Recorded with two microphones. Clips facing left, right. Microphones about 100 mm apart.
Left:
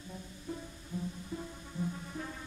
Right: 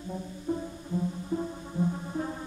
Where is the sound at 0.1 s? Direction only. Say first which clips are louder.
Right 11 dB; 35° right (ahead or behind).